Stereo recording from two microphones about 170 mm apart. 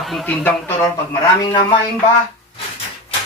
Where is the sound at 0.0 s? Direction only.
Centre (ahead or behind).